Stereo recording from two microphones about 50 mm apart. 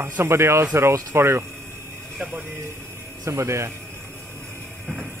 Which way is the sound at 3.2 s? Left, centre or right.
Right.